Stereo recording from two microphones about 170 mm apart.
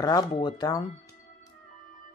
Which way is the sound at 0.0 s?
20° left (ahead or behind).